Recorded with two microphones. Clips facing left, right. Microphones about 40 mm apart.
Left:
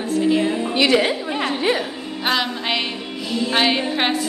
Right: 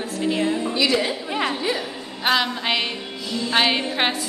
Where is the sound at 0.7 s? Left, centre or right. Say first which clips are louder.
Left 6 dB; left.